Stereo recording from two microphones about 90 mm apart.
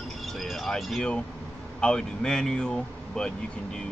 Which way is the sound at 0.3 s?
Centre (ahead or behind).